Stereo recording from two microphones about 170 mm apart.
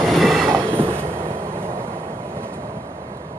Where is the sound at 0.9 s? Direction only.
15° right (ahead or behind).